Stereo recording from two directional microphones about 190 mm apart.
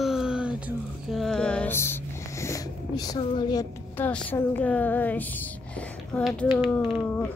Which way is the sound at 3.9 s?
10° left (ahead or behind).